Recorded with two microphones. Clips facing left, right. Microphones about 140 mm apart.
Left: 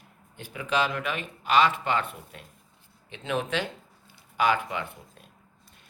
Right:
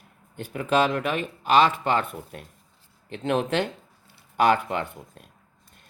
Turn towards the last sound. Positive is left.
turn(degrees=-50)  # may be behind; listen again after turning